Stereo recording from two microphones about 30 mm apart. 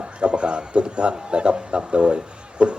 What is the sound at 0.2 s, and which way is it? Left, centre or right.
A man's voice, right.